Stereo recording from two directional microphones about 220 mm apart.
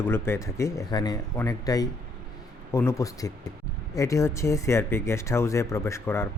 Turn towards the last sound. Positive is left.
turn(degrees=10)  # may be behind; listen again after turning